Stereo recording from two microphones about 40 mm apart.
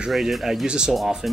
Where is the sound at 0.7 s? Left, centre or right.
Centre.